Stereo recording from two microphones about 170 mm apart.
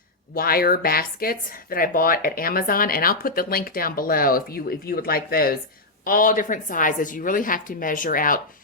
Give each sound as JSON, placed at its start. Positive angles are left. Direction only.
{"t": 0.3, "sound": "speech", "side_deg": 60}